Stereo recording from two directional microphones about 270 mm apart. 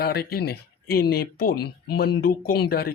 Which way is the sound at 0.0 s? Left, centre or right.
Left.